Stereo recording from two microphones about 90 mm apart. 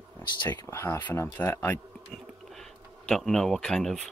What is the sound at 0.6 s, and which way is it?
Speech, 30° left (ahead or behind).